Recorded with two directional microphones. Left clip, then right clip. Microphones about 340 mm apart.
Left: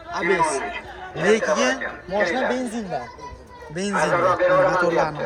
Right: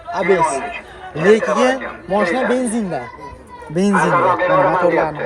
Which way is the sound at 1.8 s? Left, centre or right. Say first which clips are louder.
Right 5 dB; centre.